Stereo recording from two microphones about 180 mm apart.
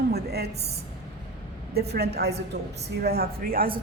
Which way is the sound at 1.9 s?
65° right (ahead or behind).